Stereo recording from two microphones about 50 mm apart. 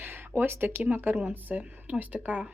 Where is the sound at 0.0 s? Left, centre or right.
Right.